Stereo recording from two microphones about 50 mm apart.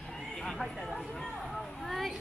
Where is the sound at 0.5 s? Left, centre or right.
Centre.